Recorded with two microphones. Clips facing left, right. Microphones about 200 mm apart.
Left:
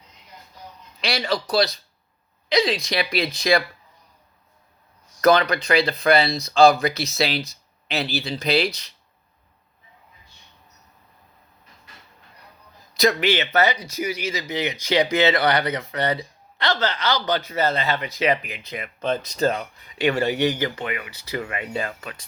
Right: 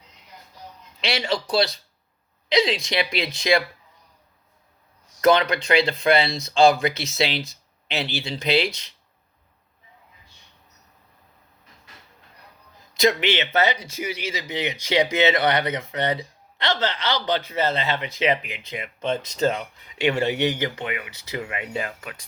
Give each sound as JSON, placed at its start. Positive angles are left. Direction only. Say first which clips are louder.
{"t": 1.0, "sound": "speech", "louder": "left 1 dB", "side_deg": -25}
{"t": 5.2, "sound": "speech", "louder": "left 1 dB", "side_deg": -25}
{"t": 13.0, "sound": "speech", "louder": "left 1 dB", "side_deg": -25}
{"t": 19.5, "sound": "speech", "louder": "even", "side_deg": 40}
{"t": 20.2, "sound": "speech", "louder": "left 1 dB", "side_deg": -20}